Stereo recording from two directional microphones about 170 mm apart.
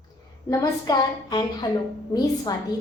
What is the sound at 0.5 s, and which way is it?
A woman's voice, 20° left (ahead or behind).